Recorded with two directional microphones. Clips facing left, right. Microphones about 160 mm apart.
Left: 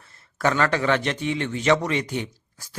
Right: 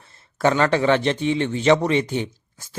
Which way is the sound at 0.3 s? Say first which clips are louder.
Right 4 dB; 25° right (ahead or behind).